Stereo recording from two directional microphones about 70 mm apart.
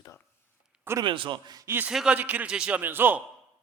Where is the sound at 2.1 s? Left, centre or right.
Right.